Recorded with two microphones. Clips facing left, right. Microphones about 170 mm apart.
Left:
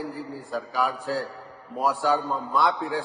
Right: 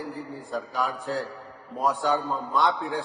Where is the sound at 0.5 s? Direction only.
Centre (ahead or behind).